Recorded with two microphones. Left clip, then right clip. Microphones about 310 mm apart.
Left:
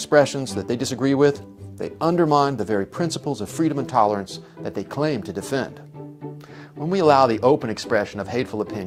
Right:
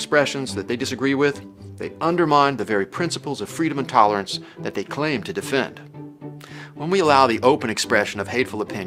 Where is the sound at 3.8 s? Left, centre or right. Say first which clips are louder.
Right 4 dB; left.